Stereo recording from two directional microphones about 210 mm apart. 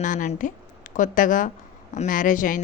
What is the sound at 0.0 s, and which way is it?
Speech, 35° left (ahead or behind).